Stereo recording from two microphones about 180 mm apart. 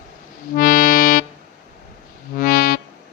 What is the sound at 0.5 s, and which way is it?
Accordion, 50° left (ahead or behind).